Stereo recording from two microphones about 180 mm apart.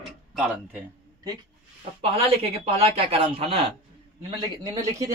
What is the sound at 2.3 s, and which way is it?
Speech, 35° right (ahead or behind).